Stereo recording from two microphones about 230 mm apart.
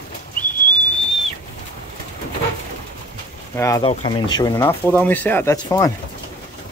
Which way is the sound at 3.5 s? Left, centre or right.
Centre.